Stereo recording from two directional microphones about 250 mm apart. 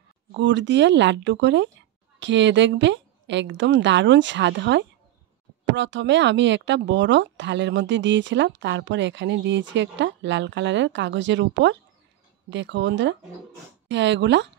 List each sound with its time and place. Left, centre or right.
0.3 s speech: right